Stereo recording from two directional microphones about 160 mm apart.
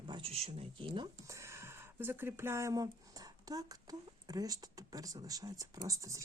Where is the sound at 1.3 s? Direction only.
20° right (ahead or behind).